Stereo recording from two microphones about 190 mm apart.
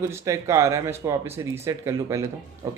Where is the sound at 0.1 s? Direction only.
15° right (ahead or behind).